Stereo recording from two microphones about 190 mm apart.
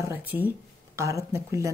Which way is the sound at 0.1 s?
10° right (ahead or behind).